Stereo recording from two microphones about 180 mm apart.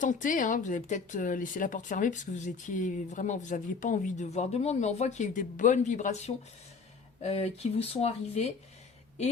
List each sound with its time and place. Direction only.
0.0 s speech: 45° left (ahead or behind)